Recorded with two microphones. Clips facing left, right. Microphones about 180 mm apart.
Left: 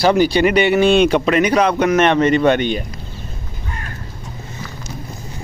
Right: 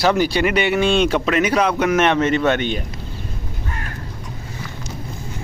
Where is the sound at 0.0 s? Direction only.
Centre (ahead or behind).